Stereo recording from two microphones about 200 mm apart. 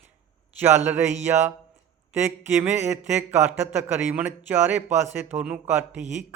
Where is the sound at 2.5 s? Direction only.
10° right (ahead or behind).